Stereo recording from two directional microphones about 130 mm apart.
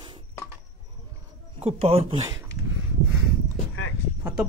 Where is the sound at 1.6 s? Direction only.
50° right (ahead or behind).